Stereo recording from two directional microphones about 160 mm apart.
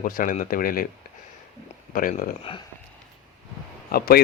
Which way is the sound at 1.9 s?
60° left (ahead or behind).